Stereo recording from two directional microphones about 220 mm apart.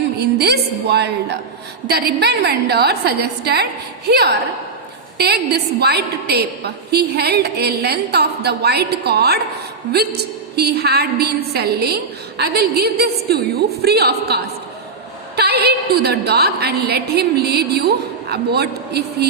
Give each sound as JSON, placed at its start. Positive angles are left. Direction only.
{"t": 0.2, "sound": "a woman's voice", "side_deg": -45}